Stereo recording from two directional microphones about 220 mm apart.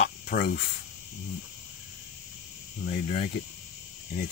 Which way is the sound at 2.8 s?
40° left (ahead or behind).